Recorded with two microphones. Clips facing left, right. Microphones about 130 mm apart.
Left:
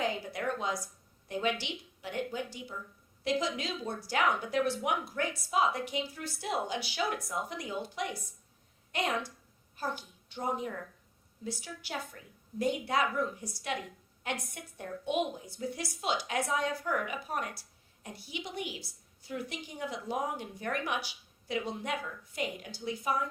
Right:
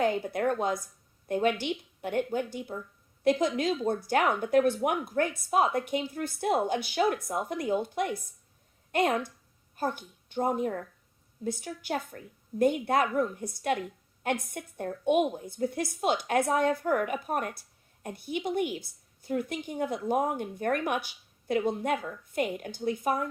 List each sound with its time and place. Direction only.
0.0 s a woman's voice: 50° right (ahead or behind)